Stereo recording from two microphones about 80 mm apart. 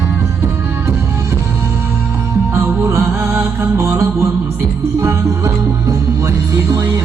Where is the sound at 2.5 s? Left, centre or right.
Right.